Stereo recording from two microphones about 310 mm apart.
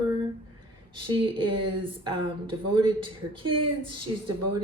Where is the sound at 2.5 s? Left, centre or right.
Centre.